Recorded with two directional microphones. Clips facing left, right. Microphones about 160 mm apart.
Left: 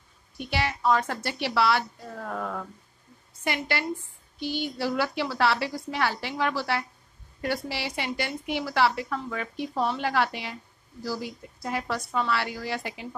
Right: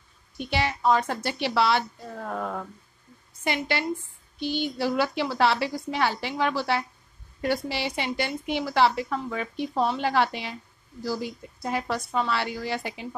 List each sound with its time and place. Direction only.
0.4 s a woman's voice: 25° right (ahead or behind)